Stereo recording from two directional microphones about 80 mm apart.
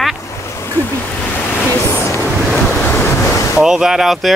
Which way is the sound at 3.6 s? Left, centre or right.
Centre.